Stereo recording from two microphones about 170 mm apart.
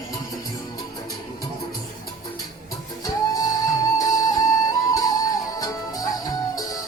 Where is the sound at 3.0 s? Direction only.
20° left (ahead or behind).